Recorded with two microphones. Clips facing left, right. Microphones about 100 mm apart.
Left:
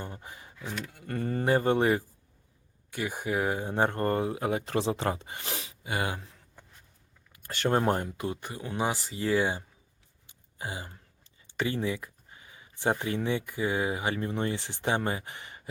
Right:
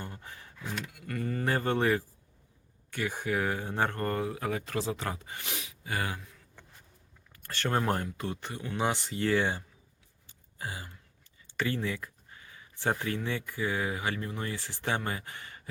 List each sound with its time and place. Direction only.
0.0 s a sound: 15° left (ahead or behind)
0.9 s speech: 30° left (ahead or behind)
1.5 s speech: 15° left (ahead or behind); by 5.7 s 35° left (ahead or behind)
5.8 s speech: 20° left (ahead or behind)
7.3 s speech: 15° left (ahead or behind)
8.2 s speech: 10° left (ahead or behind)
10.6 s a sound: 20° left (ahead or behind)
11.2 s speech: 20° left (ahead or behind)